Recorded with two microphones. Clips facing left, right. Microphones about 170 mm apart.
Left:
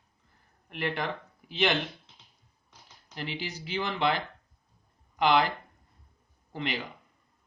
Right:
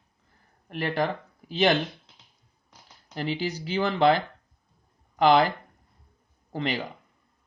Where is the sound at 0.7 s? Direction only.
40° right (ahead or behind).